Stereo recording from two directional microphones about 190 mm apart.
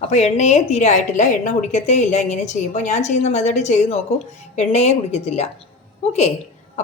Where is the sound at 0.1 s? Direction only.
35° left (ahead or behind).